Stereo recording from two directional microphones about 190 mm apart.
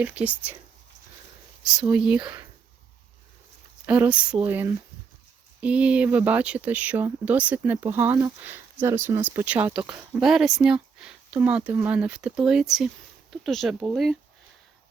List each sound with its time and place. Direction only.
0.0 s speech: 5° right (ahead or behind)
1.7 s speech: 5° right (ahead or behind)
3.8 s speech: 10° right (ahead or behind)